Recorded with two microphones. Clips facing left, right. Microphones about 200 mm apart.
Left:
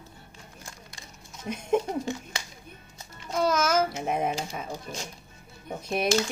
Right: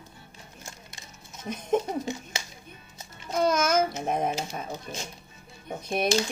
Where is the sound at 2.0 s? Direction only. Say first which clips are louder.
Even; 20° right (ahead or behind).